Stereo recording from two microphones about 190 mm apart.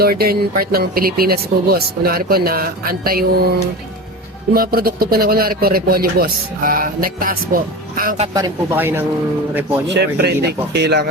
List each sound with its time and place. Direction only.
0.0 s speech: 55° right (ahead or behind)
4.5 s speech: 50° right (ahead or behind)
8.3 s speech: 20° right (ahead or behind)
9.8 s speech: 60° right (ahead or behind)